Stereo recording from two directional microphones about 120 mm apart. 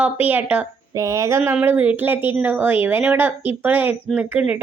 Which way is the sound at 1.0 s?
25° right (ahead or behind).